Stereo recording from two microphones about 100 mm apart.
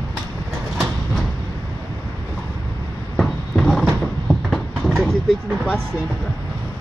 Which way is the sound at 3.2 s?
5° left (ahead or behind).